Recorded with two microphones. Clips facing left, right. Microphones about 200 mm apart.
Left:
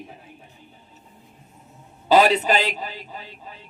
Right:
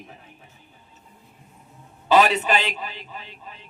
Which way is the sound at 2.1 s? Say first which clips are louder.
Left 2 dB; 35° left (ahead or behind).